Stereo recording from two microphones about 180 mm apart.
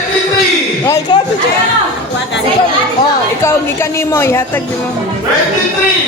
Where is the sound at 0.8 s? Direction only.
20° left (ahead or behind).